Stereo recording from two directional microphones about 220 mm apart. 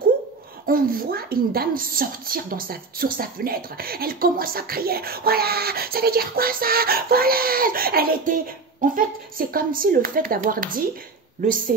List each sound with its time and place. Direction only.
0.7 s a woman's voice: 40° right (ahead or behind)